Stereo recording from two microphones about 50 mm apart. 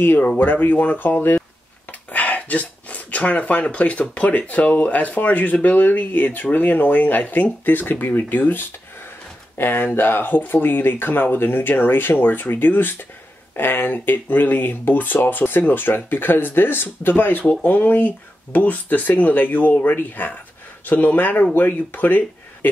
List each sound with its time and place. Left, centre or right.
0.0 s speech: left